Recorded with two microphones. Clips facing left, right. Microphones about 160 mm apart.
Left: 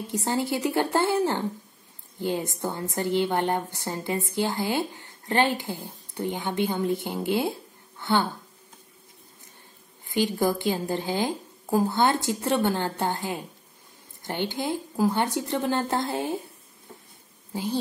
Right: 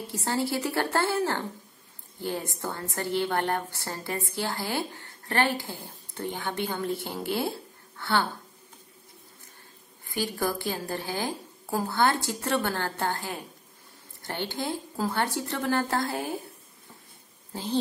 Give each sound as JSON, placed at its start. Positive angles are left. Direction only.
{"t": 0.0, "sound": "a woman's voice", "side_deg": 15}
{"t": 10.0, "sound": "a woman's voice", "side_deg": 20}
{"t": 17.5, "sound": "speech", "side_deg": 10}